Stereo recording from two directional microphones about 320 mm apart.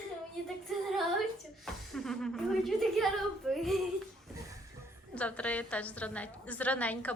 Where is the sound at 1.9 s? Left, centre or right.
Centre.